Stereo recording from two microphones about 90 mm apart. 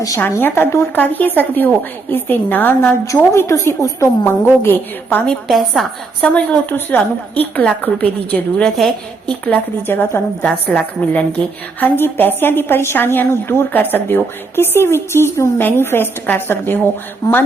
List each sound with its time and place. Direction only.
0.2 s a woman's voice: 25° left (ahead or behind)
5.2 s a woman's voice: 5° left (ahead or behind)
6.2 s a woman's voice: 15° left (ahead or behind)
9.5 s a woman's voice: 25° left (ahead or behind)
17.2 s a woman's voice: 40° left (ahead or behind)